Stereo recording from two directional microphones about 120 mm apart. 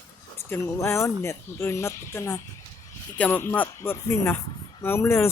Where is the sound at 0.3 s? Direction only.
20° left (ahead or behind).